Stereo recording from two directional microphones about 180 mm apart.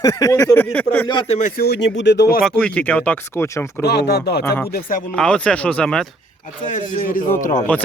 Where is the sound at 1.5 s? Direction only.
60° left (ahead or behind).